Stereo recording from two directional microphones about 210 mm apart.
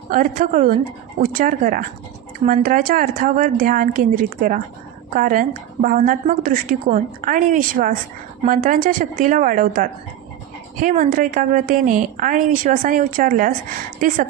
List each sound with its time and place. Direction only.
0.1 s a woman's voice: 40° right (ahead or behind)
2.4 s speech: 30° right (ahead or behind)
2.6 s a woman's voice: 40° right (ahead or behind)